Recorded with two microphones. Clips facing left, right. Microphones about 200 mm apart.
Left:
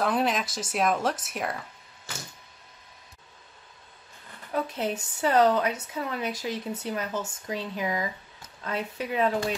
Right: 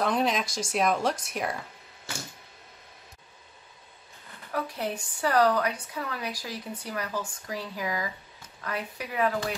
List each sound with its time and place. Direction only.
0.0 s a woman's voice: 5° left (ahead or behind)
4.5 s a woman's voice: 20° left (ahead or behind)